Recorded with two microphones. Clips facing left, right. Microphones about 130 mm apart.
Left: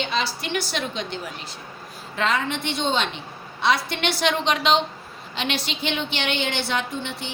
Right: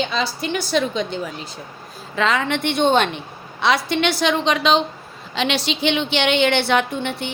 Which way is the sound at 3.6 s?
90° right.